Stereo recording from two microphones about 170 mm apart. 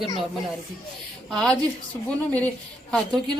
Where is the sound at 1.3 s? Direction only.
5° left (ahead or behind).